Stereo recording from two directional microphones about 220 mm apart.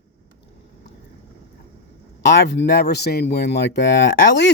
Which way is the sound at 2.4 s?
50° left (ahead or behind).